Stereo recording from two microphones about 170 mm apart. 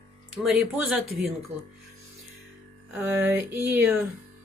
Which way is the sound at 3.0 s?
15° right (ahead or behind).